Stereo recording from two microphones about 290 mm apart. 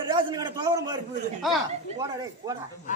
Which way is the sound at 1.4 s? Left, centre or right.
Centre.